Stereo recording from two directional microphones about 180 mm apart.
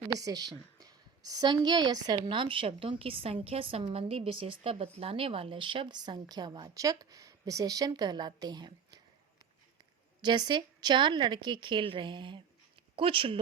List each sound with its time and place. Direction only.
0.1 s a woman's voice: 20° right (ahead or behind)
10.2 s a woman's voice: 25° right (ahead or behind)